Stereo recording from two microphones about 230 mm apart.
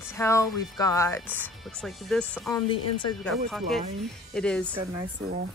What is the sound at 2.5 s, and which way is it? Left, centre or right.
Speech, centre.